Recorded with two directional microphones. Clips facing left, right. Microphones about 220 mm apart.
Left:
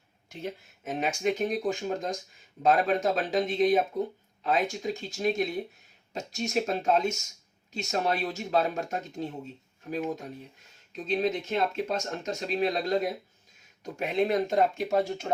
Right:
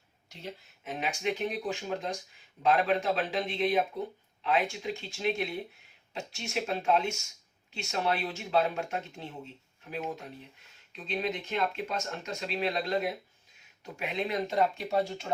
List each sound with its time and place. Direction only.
0.3 s speech: 50° left (ahead or behind)
10.9 s speech: 45° left (ahead or behind)